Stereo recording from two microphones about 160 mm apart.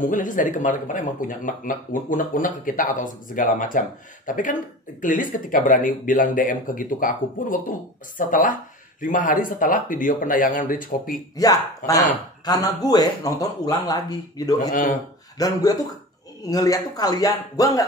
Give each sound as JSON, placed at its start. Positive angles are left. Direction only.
{"t": 0.0, "sound": "speech", "side_deg": 55}
{"t": 11.3, "sound": "speech", "side_deg": 20}
{"t": 14.7, "sound": "speech", "side_deg": 55}
{"t": 15.3, "sound": "speech", "side_deg": 25}